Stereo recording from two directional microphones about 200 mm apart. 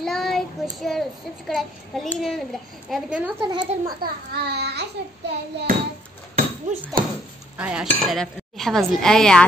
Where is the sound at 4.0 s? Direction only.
50° right (ahead or behind).